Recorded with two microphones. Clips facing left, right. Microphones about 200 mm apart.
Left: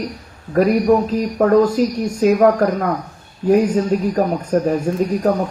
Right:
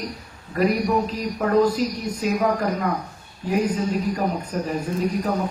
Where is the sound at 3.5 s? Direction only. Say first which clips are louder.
Left 8 dB; 45° left (ahead or behind).